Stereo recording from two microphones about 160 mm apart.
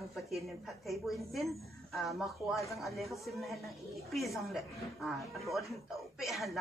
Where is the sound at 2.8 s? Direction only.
Centre (ahead or behind).